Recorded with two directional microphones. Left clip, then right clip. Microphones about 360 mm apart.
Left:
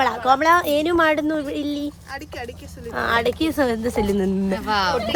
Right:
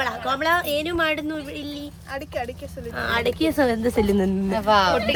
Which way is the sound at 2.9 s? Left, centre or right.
Centre.